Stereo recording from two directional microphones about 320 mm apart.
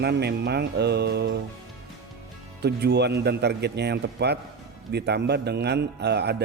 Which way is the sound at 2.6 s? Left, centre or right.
Right.